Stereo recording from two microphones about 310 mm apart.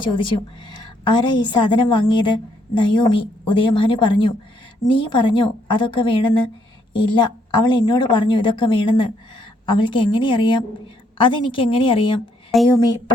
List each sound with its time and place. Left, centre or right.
0.0 s a woman's voice: centre
12.5 s speech: centre